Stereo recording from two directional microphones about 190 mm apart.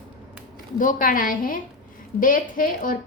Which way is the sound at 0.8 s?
45° left (ahead or behind).